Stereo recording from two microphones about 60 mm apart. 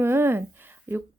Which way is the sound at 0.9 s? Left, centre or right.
Right.